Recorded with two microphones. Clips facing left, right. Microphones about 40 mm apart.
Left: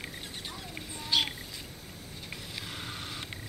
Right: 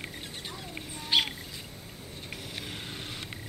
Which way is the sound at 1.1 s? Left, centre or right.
Right.